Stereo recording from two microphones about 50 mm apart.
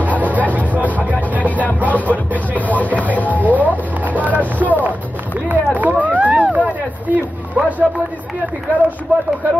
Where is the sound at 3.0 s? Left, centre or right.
Left.